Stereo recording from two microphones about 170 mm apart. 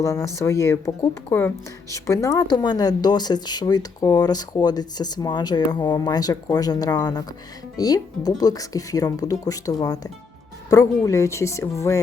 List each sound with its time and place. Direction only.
0.0 s speech: 15° left (ahead or behind)